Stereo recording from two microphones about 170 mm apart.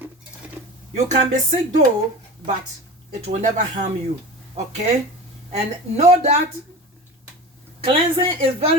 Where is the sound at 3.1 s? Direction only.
45° right (ahead or behind).